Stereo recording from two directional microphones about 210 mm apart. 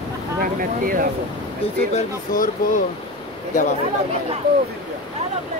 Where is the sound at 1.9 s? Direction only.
40° left (ahead or behind).